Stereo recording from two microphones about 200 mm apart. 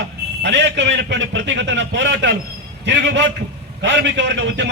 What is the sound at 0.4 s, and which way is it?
A man's voice, 60° right (ahead or behind).